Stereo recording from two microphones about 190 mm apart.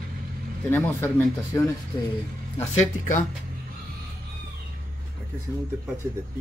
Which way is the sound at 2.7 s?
40° left (ahead or behind).